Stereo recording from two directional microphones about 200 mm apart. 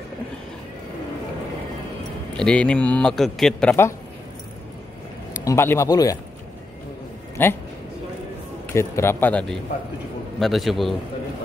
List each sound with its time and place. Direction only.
2.3 s a man's voice: 5° left (ahead or behind)
5.4 s speech: 15° left (ahead or behind)
7.4 s speech: 10° left (ahead or behind)
8.7 s a man's voice: 15° left (ahead or behind)